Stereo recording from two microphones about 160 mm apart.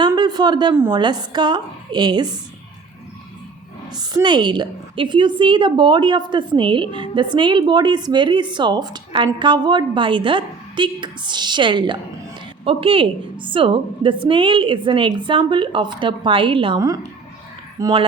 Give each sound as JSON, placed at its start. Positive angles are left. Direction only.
{"t": 0.2, "sound": "speech", "side_deg": -25}
{"t": 0.7, "sound": "a woman's voice", "side_deg": -15}
{"t": 0.9, "sound": "a woman's voice", "side_deg": -30}
{"t": 3.9, "sound": "a woman's voice", "side_deg": -25}